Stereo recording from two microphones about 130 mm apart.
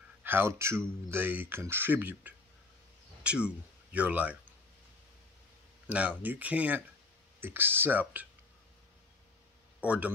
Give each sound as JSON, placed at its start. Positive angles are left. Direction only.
{"t": 0.2, "sound": "speech", "side_deg": -15}
{"t": 5.9, "sound": "speech", "side_deg": -10}
{"t": 9.8, "sound": "speech", "side_deg": -10}